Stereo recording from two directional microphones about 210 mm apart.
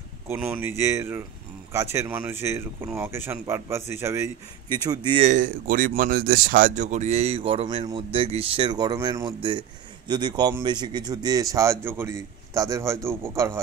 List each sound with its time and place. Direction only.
0.3 s speech: 10° right (ahead or behind)
5.3 s speech: 40° right (ahead or behind); by 13.2 s 15° right (ahead or behind)